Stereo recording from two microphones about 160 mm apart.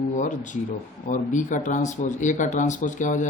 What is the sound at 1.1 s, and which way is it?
Speech, 55° left (ahead or behind).